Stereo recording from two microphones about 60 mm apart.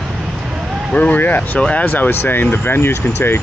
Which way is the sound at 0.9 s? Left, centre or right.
Left.